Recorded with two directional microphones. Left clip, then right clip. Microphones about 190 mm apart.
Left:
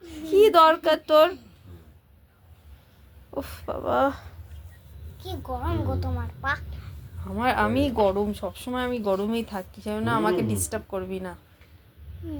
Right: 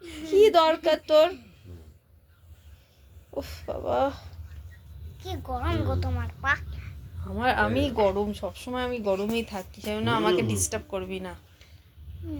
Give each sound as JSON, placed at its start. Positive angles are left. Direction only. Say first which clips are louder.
{"t": 0.0, "sound": "a sound", "louder": "even", "side_deg": -15}
{"t": 0.3, "sound": "speech", "louder": "left 3 dB", "side_deg": 15}
{"t": 3.3, "sound": "speech", "louder": "left 2 dB", "side_deg": 15}
{"t": 5.5, "sound": "a woman's voice", "louder": "even", "side_deg": -15}